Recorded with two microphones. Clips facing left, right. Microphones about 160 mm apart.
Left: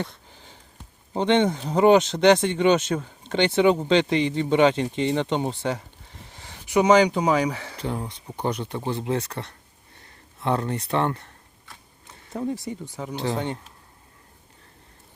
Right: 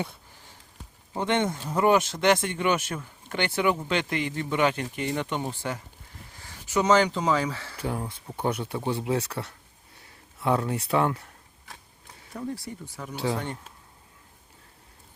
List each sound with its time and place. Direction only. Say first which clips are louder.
1.1 s speech: left 5 dB; 25° left (ahead or behind)
7.8 s speech: left 1 dB; 5° right (ahead or behind)
12.3 s speech: left 6 dB; 20° left (ahead or behind)